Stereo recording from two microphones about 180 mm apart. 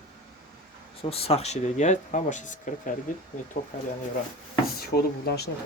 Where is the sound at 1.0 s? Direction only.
35° left (ahead or behind).